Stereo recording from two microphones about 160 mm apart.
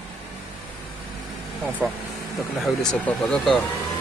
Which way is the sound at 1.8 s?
10° right (ahead or behind).